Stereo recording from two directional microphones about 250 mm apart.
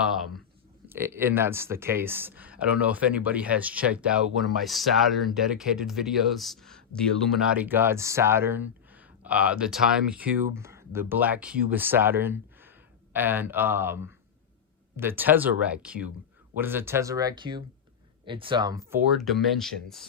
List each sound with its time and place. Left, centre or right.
0.0 s speech: centre
19.2 s speech: centre